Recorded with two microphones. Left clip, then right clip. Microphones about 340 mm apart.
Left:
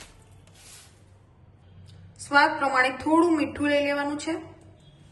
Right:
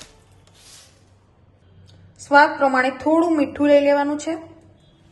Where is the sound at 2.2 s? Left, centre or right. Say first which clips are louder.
Right 6 dB; right.